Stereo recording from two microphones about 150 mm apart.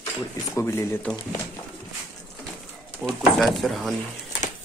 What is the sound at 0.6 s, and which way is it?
Speech, 15° left (ahead or behind).